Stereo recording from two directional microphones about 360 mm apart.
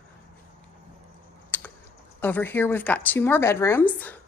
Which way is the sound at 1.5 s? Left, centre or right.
Centre.